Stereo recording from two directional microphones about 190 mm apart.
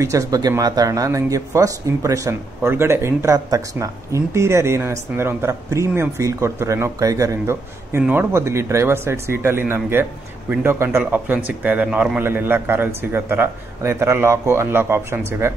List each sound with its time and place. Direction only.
0.0 s speech: 20° right (ahead or behind)